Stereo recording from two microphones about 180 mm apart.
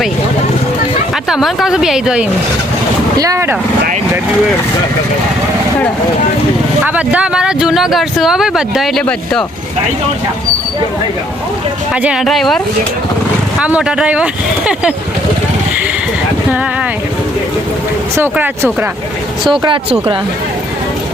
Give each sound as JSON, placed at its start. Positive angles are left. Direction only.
{"t": 1.3, "sound": "speech", "side_deg": 0}
{"t": 3.2, "sound": "speech", "side_deg": -15}
{"t": 6.8, "sound": "speech", "side_deg": -10}
{"t": 12.0, "sound": "speech", "side_deg": 0}
{"t": 18.2, "sound": "speech", "side_deg": -10}
{"t": 19.5, "sound": "speech", "side_deg": -25}